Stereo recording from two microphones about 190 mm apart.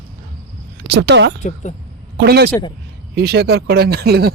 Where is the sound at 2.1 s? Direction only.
60° right (ahead or behind).